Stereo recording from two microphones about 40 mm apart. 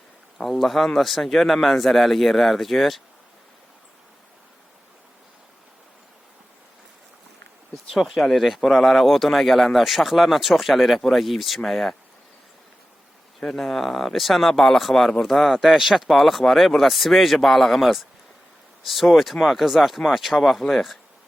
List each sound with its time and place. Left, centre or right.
0.3 s speech: centre
7.9 s speech: centre
13.6 s speech: centre